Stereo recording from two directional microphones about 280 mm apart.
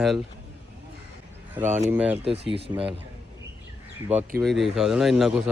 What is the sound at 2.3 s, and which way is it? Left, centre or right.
Speech, right.